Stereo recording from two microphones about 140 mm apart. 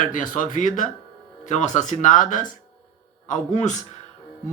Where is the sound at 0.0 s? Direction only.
70° left (ahead or behind).